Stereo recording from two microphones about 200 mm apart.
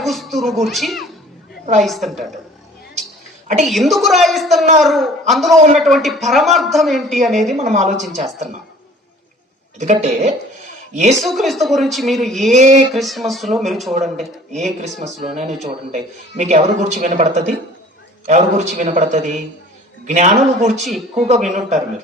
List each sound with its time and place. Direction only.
0.0 s a woman's voice: centre (ahead or behind)
3.7 s a woman's voice: centre (ahead or behind)
7.5 s a man's voice: 35° right (ahead or behind)
9.7 s a man's voice: 35° right (ahead or behind)
11.2 s a woman's voice: centre (ahead or behind)
12.5 s a man's voice: 35° right (ahead or behind)
12.9 s a woman's voice: centre (ahead or behind)
14.5 s a man's voice: 35° right (ahead or behind)
14.8 s a woman's voice: centre (ahead or behind)
15.4 s a man's voice: 35° right (ahead or behind)
20.8 s a woman's voice: centre (ahead or behind)
21.5 s a man's voice: 35° right (ahead or behind)